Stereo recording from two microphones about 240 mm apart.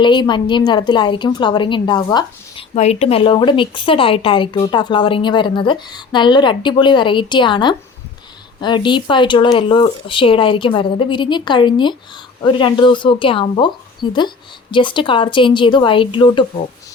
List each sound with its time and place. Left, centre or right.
0.0 s speech: centre
2.7 s speech: left